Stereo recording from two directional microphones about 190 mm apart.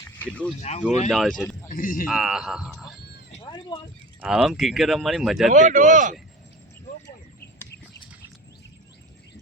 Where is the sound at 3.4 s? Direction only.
25° left (ahead or behind).